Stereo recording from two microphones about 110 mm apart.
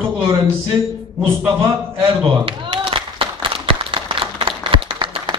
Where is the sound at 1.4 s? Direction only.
20° right (ahead or behind).